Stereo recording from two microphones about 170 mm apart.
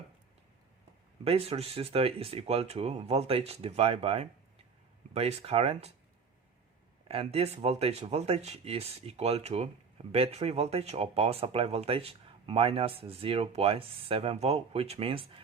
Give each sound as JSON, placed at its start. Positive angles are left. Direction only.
{"t": 1.2, "sound": "speech", "side_deg": -35}
{"t": 7.1, "sound": "speech", "side_deg": -35}